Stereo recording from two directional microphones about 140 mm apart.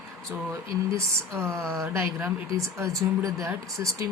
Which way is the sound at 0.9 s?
20° right (ahead or behind).